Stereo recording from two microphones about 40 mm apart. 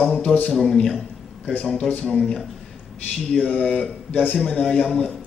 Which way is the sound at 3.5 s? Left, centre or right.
Left.